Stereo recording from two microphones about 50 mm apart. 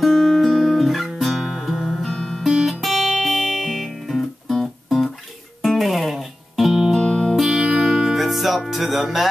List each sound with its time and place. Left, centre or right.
0.0 s guitar: centre
2.1 s music: centre
2.4 s guitar: centre
2.8 s music: centre
4.8 s guitar: centre
5.6 s music: centre
7.0 s music: left
7.3 s music: centre